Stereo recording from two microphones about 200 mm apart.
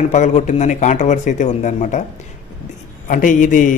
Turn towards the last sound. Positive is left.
turn(degrees=40)  # may be behind; listen again after turning